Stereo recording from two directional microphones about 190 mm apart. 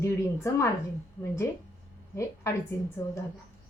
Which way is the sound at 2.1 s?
15° left (ahead or behind).